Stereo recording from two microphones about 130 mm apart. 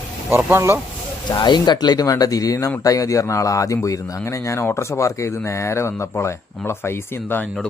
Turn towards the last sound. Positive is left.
turn(degrees=15)  # may be behind; listen again after turning